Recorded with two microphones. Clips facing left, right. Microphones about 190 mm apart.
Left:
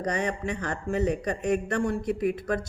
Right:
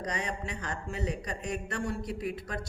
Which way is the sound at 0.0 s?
55° left (ahead or behind).